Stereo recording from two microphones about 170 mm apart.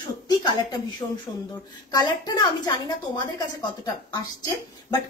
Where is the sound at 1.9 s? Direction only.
25° left (ahead or behind).